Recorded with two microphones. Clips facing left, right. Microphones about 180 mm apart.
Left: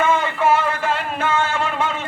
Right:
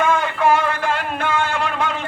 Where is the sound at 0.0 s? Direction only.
5° left (ahead or behind).